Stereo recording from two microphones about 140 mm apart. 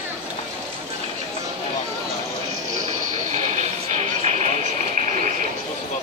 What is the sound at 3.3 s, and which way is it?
Vehicle, 50° right (ahead or behind).